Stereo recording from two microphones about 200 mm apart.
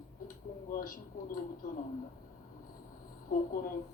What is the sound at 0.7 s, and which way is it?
Speech, 45° left (ahead or behind).